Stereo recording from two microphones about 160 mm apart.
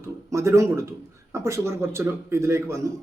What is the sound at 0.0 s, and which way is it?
Speech, 20° right (ahead or behind).